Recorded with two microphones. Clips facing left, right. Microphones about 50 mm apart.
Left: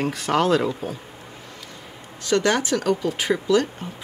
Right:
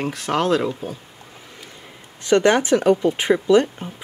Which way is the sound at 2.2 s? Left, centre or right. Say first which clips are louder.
Right 5 dB; right.